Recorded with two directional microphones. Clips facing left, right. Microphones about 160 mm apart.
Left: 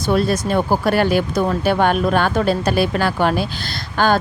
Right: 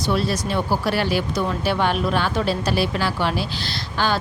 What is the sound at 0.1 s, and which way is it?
Speech, 50° left (ahead or behind).